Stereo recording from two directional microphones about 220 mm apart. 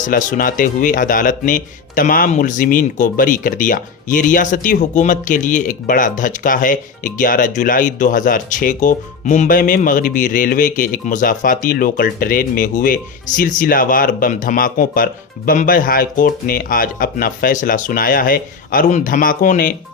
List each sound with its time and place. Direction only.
0.0 s speech: 35° left (ahead or behind)